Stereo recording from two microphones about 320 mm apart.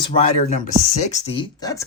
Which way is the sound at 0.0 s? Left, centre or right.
Centre.